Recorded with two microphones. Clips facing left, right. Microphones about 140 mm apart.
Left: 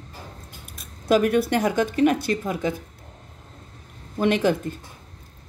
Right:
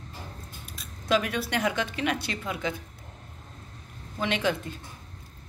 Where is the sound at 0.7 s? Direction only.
50° left (ahead or behind).